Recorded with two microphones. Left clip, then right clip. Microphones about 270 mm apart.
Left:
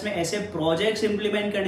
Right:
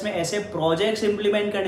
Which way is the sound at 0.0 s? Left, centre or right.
Centre.